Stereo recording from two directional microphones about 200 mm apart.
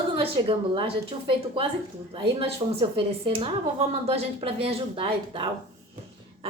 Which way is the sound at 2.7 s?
30° right (ahead or behind).